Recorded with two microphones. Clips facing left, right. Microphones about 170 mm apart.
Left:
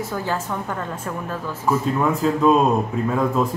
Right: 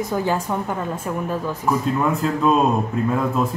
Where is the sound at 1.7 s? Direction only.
Centre (ahead or behind).